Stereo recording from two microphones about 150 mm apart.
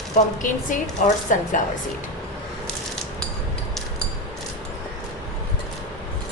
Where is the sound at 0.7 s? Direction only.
60° left (ahead or behind).